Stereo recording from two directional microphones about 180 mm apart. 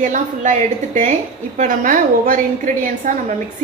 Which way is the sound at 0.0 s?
45° right (ahead or behind).